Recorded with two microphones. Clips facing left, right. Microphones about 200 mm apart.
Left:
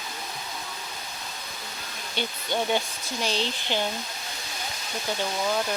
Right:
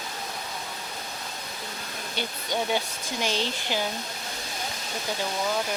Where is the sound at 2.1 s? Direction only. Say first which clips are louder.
Left 1 dB; 10° right (ahead or behind).